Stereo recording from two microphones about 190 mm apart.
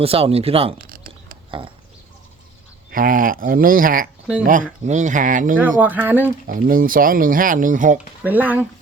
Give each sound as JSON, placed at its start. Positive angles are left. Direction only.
{"t": 0.0, "sound": "speech", "side_deg": -30}
{"t": 0.8, "sound": "a sound", "side_deg": -50}
{"t": 1.5, "sound": "speech", "side_deg": -25}
{"t": 2.9, "sound": "speech", "side_deg": -45}
{"t": 5.8, "sound": "speech", "side_deg": -10}
{"t": 6.5, "sound": "speech", "side_deg": -45}
{"t": 8.2, "sound": "speech", "side_deg": -10}